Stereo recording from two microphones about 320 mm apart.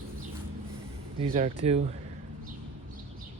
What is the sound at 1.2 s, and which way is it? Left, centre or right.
Speech, centre.